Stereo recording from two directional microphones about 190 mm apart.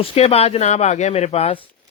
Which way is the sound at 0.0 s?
30° left (ahead or behind).